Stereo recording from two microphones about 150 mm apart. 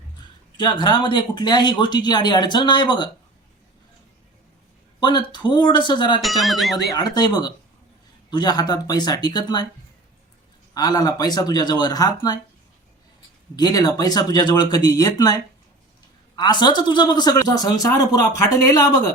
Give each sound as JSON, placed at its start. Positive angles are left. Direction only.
{"t": 0.5, "sound": "speech", "side_deg": 30}
{"t": 4.9, "sound": "speech", "side_deg": 30}
{"t": 6.2, "sound": "speech", "side_deg": 0}
{"t": 6.7, "sound": "speech", "side_deg": 25}
{"t": 10.8, "sound": "speech", "side_deg": 25}
{"t": 13.6, "sound": "speech", "side_deg": 25}